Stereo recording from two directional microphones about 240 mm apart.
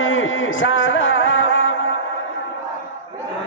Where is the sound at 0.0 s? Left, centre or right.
Left.